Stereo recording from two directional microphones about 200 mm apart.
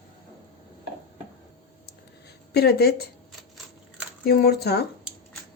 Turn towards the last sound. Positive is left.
turn(degrees=55)  # may be behind; listen again after turning